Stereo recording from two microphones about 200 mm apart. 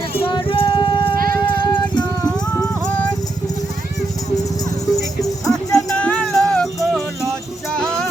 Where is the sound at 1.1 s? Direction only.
45° right (ahead or behind).